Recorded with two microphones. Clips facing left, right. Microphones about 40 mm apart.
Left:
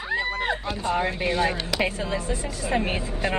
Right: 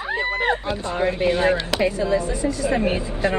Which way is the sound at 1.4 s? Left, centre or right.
Right.